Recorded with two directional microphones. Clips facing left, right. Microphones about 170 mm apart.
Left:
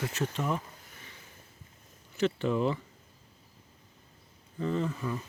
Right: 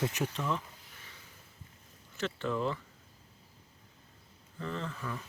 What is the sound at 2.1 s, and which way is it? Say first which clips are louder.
Speech: left 6 dB; 15° left (ahead or behind).